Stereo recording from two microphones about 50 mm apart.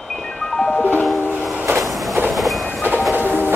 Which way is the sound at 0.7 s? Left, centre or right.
Left.